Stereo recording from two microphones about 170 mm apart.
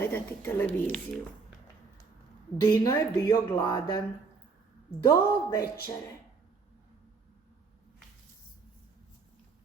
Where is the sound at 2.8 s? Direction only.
20° left (ahead or behind).